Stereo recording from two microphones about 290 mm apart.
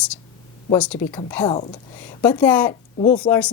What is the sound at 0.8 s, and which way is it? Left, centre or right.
A woman's voice, centre.